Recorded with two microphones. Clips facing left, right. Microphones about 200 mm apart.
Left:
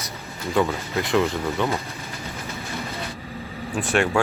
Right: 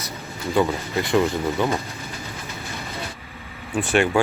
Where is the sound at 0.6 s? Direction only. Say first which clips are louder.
Right 1 dB; centre (ahead or behind).